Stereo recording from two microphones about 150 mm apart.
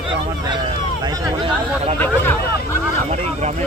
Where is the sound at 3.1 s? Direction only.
50° right (ahead or behind).